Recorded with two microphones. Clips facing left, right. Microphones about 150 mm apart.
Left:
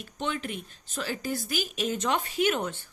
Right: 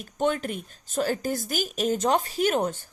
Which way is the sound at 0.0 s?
45° right (ahead or behind).